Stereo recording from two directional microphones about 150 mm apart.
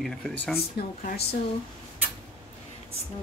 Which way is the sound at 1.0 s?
80° left.